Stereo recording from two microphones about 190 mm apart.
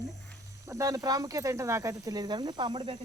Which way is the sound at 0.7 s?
15° right (ahead or behind).